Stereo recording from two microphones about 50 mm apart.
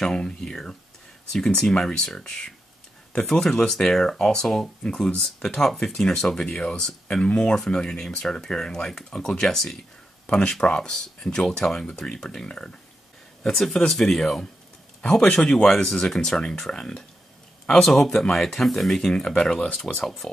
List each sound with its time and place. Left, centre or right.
0.0 s speech: centre
10.2 s speech: left; by 20.2 s centre